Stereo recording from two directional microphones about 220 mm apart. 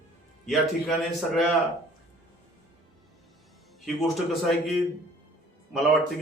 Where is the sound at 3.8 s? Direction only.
Centre (ahead or behind).